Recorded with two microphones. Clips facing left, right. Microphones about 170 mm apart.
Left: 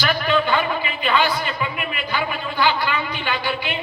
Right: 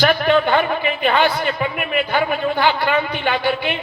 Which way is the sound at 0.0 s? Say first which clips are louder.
Right 5 dB; 60° right (ahead or behind).